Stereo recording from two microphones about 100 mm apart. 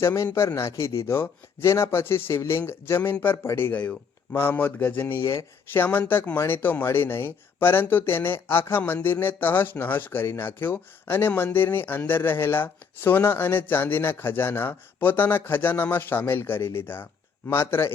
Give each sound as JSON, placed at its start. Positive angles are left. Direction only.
{"t": 0.0, "sound": "speech", "side_deg": 30}